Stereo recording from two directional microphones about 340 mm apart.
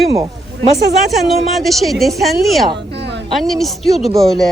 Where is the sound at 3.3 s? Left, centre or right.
Centre.